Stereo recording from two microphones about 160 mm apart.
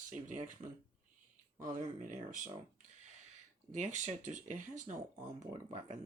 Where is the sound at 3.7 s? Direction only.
50° right (ahead or behind).